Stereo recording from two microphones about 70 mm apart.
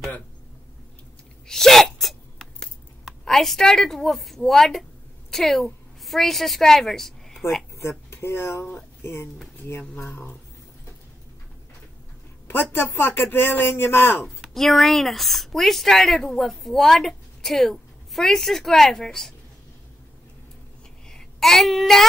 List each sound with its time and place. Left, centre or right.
1.5 s sneeze: centre
3.1 s a woman's voice: centre
8.1 s speech: left
12.7 s speech: left
14.2 s speech: centre
21.1 s child singing: centre